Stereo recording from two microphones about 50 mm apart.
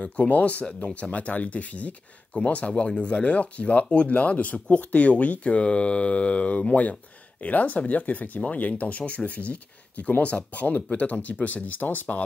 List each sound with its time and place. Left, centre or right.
0.0 s speech: left